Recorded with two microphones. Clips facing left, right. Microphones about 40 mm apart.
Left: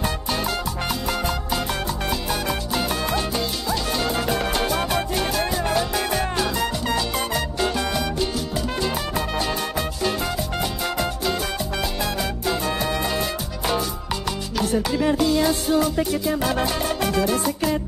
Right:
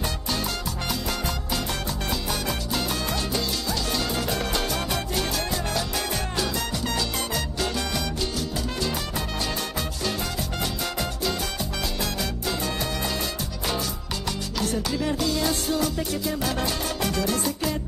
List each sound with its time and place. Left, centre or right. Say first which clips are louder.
2.7 s music: left 4 dB; centre
14.6 s music: left 5 dB; centre